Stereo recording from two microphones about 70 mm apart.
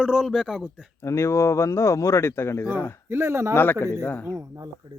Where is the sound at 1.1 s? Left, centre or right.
Left.